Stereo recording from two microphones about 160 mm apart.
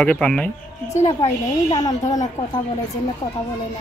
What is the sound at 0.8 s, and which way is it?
Speech, 40° left (ahead or behind).